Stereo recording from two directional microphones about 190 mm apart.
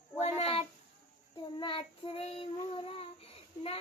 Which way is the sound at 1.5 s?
25° left (ahead or behind).